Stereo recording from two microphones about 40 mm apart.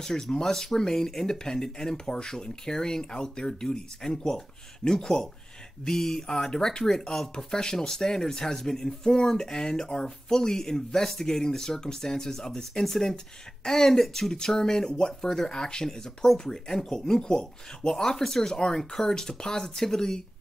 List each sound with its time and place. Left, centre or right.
0.0 s speech: centre